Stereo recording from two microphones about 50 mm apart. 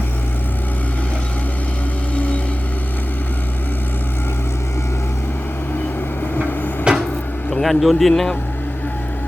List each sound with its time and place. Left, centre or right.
6.9 s cupboard open or close: centre
7.6 s speech: centre